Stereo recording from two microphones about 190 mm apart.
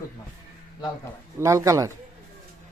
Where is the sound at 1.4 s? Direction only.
15° right (ahead or behind).